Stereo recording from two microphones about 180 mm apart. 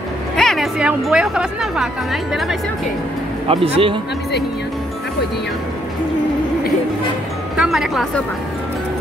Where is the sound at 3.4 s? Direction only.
30° right (ahead or behind).